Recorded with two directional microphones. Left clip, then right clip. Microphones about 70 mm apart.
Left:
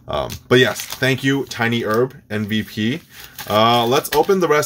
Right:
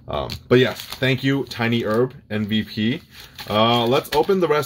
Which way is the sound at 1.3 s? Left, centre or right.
Centre.